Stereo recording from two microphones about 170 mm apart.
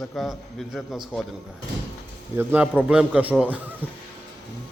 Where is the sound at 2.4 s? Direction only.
10° right (ahead or behind).